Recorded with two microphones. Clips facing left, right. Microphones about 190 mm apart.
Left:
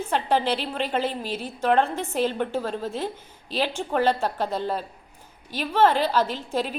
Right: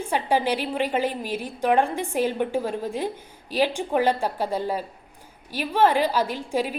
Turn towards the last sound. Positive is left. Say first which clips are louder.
# right 2 dB
turn(degrees=-10)  # may be behind; listen again after turning